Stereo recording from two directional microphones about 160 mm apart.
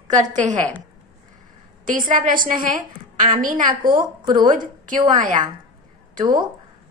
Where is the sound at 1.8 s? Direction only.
55° right (ahead or behind).